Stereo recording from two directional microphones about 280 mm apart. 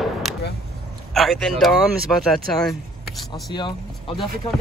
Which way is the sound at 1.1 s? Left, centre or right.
Centre.